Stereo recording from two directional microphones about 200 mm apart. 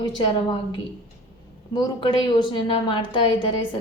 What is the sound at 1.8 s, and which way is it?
A woman's voice, 20° left (ahead or behind).